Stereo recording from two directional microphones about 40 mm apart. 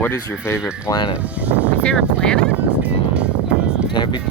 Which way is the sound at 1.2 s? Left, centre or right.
Right.